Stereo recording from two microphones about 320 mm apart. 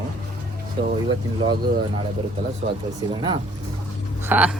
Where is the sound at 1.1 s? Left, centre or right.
Centre.